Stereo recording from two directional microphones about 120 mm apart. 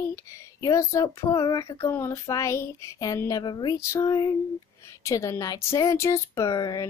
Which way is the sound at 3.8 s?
25° left (ahead or behind).